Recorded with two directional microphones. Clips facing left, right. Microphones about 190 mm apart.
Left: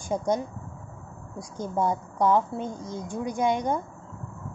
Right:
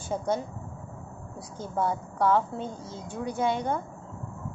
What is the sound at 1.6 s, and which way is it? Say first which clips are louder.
A woman's voice: left 2 dB; 15° left (ahead or behind).